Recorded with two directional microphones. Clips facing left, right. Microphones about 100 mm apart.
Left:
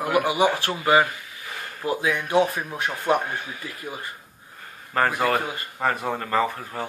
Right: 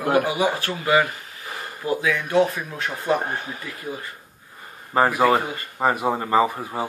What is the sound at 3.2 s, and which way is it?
Speech, 40° right (ahead or behind).